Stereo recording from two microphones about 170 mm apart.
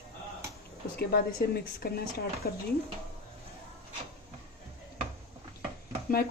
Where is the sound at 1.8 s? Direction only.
65° left (ahead or behind).